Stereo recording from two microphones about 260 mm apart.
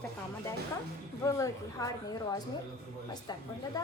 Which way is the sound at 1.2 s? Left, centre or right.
Centre.